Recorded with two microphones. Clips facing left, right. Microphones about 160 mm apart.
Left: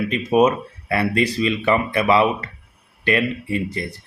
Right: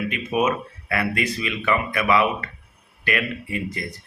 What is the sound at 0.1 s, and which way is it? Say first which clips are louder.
A man's voice: left 8 dB; 35° left (ahead or behind).